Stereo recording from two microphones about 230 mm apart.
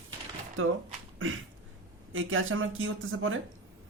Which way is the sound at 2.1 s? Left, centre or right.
Right.